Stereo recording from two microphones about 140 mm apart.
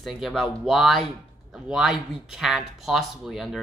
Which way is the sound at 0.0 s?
Centre (ahead or behind).